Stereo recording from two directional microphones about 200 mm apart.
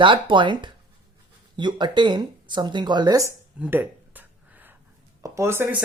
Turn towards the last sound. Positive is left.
turn(degrees=-10)  # may be behind; listen again after turning